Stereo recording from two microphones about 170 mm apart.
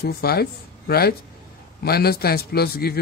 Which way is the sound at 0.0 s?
65° left (ahead or behind).